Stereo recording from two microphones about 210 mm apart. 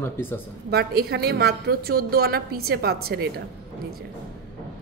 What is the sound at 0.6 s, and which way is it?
A woman's voice, 50° right (ahead or behind).